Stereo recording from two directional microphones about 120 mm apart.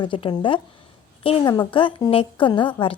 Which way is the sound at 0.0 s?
45° left (ahead or behind).